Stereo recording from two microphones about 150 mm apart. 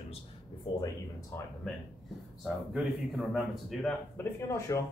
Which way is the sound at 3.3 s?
Centre (ahead or behind).